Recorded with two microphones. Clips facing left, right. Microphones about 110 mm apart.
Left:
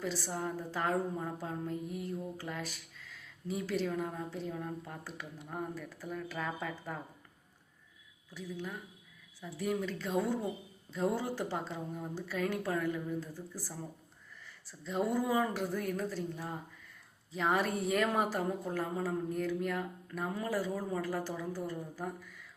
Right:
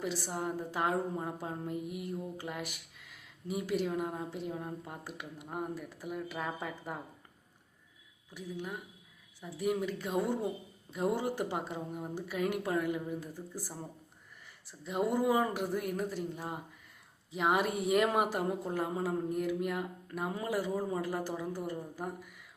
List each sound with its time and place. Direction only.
0.0 s speech: 15° right (ahead or behind)
8.3 s speech: 15° right (ahead or behind)